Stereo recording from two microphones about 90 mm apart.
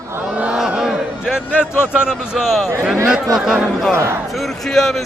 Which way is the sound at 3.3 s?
5° right (ahead or behind).